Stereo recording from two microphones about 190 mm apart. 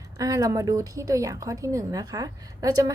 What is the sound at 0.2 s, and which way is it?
A woman's voice, 15° right (ahead or behind).